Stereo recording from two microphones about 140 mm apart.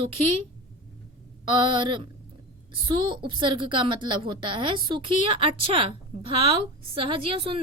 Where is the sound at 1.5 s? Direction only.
35° right (ahead or behind).